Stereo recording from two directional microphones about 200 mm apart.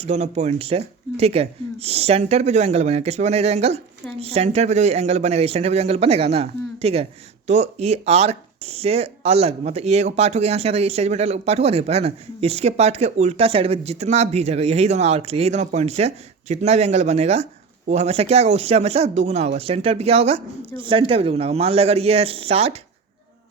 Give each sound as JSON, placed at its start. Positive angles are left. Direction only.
{"t": 0.0, "sound": "a man's voice", "side_deg": -35}